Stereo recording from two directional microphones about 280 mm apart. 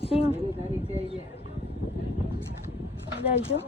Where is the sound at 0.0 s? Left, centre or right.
Left.